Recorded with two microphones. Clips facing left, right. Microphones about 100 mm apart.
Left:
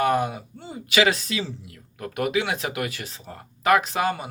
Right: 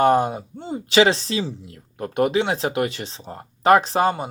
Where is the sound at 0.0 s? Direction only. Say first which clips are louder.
Right 5 dB; 30° right (ahead or behind).